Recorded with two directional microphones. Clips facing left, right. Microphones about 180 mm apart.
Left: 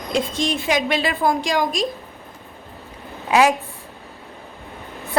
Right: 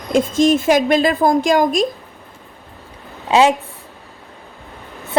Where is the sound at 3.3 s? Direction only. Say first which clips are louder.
Right 3 dB; 25° right (ahead or behind).